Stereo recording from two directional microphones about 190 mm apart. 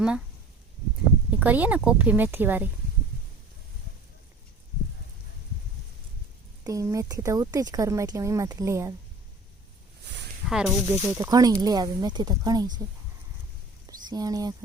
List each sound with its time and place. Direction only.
1.3 s speech: 10° right (ahead or behind)
6.7 s speech: 15° right (ahead or behind)
10.5 s speech: centre (ahead or behind)
10.8 s speech: 20° right (ahead or behind)
13.8 s a sound: 20° right (ahead or behind)